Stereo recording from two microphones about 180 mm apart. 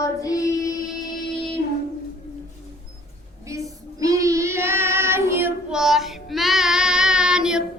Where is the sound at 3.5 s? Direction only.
20° right (ahead or behind).